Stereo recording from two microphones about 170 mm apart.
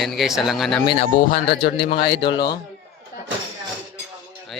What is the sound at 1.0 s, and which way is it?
Speech, 65° left (ahead or behind).